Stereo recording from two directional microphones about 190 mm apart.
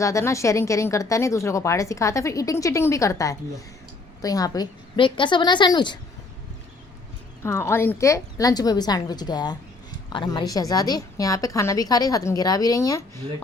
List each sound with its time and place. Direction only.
0.0 s a woman's voice: 15° left (ahead or behind)
7.4 s a woman's voice: 15° left (ahead or behind)